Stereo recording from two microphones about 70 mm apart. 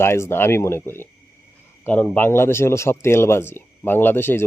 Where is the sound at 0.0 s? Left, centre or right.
Left.